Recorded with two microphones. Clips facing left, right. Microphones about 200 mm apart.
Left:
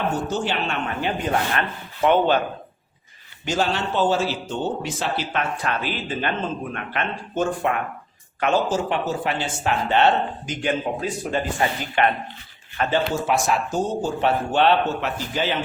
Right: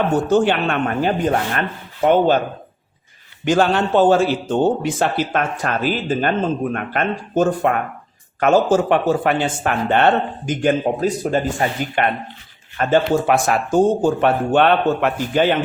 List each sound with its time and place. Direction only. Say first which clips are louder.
0.3 s speech: right 9 dB; 55° right (ahead or behind)
3.4 s speech: right 7 dB; 55° right (ahead or behind)